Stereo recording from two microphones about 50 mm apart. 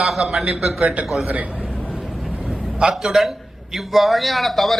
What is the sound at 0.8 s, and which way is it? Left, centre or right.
Speech, right.